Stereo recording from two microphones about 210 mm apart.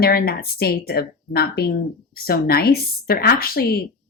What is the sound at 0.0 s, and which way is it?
Speech, 45° left (ahead or behind).